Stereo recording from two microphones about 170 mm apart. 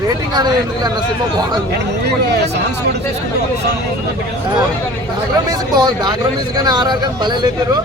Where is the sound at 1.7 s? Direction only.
80° right.